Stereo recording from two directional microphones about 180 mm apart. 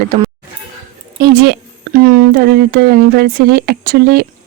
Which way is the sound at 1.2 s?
65° right (ahead or behind).